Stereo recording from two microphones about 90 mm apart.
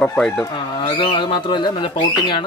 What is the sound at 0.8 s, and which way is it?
Speech, 60° left (ahead or behind).